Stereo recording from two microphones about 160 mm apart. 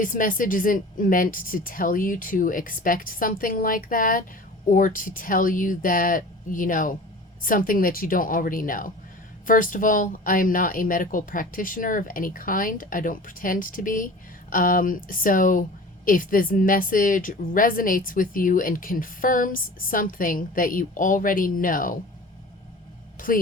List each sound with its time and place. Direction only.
0.0 s speech: 55° left (ahead or behind)